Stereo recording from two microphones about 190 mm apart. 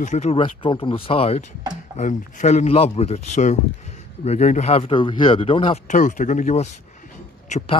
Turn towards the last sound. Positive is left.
turn(degrees=40)  # may be behind; listen again after turning